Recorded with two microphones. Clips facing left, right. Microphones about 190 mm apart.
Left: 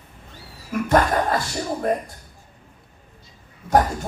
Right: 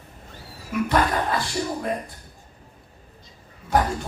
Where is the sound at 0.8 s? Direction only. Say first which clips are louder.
Left 4 dB; 45° left (ahead or behind).